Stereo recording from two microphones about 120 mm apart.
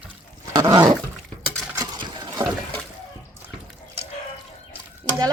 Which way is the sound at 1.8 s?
35° right (ahead or behind).